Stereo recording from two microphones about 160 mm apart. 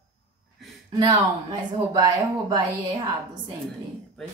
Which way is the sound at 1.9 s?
25° right (ahead or behind).